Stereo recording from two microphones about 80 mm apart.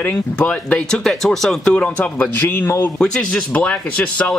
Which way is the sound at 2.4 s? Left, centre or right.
Left.